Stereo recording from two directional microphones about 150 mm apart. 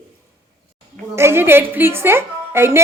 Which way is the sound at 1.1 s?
15° right (ahead or behind).